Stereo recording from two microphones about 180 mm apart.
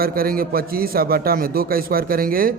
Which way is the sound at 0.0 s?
55° right (ahead or behind).